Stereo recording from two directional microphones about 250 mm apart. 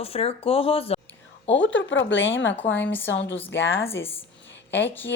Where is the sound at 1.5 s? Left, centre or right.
Left.